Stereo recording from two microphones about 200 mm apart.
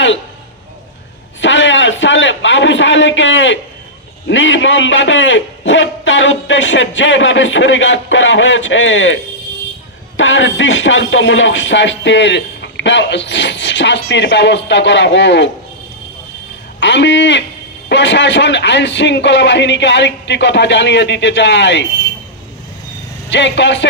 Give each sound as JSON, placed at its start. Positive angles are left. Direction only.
{"t": 1.4, "sound": "a sound", "side_deg": 65}
{"t": 4.3, "sound": "a man's voice", "side_deg": 70}
{"t": 16.8, "sound": "speech", "side_deg": 65}
{"t": 23.3, "sound": "speech", "side_deg": 65}